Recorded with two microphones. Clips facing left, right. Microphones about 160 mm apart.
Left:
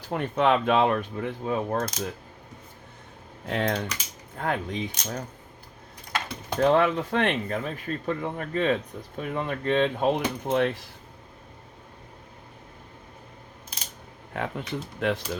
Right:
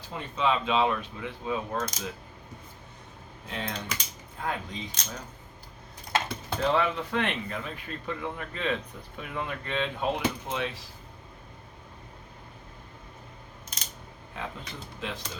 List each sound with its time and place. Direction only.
0.1 s speech: 60° left (ahead or behind)
3.4 s speech: 60° left (ahead or behind)
6.6 s speech: 50° left (ahead or behind)
14.3 s speech: 60° left (ahead or behind)